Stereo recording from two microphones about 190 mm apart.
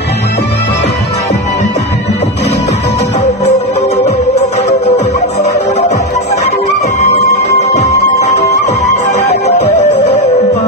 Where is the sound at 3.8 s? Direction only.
35° left (ahead or behind).